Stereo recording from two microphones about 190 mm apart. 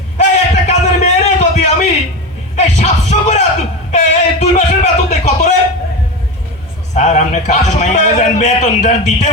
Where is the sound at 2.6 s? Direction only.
35° left (ahead or behind).